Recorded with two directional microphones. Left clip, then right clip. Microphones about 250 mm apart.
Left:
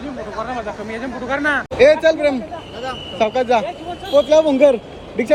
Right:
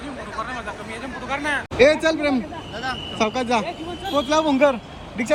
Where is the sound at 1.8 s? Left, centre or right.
Centre.